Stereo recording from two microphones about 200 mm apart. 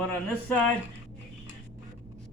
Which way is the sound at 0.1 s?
5° left (ahead or behind).